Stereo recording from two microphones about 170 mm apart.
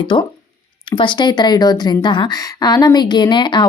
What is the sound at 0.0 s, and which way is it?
A woman's voice, 30° left (ahead or behind).